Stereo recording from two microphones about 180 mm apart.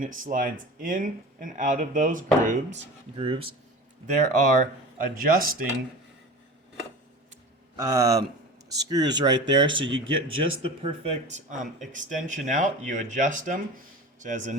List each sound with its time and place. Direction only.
0.0 s speech: 50° right (ahead or behind); by 3.5 s 30° right (ahead or behind)
4.0 s speech: 40° right (ahead or behind)
7.8 s speech: 15° right (ahead or behind)
10.0 s speech: 90° right
10.6 s speech: 30° right (ahead or behind)